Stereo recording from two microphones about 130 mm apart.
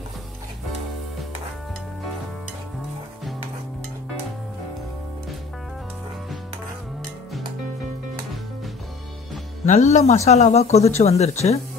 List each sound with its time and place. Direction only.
9.7 s speech: 60° left (ahead or behind)